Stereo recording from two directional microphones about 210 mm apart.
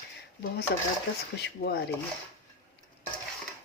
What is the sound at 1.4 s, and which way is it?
Speech, 50° left (ahead or behind).